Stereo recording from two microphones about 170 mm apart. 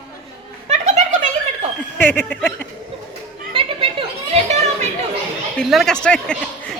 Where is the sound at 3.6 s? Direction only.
30° right (ahead or behind).